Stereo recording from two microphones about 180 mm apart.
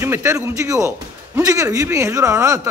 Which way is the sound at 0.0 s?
15° right (ahead or behind).